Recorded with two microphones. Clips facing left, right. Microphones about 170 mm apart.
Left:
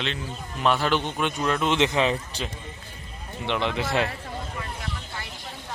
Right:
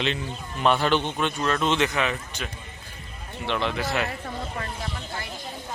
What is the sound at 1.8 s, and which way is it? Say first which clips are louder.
Speech: left 3 dB; 25° left (ahead or behind).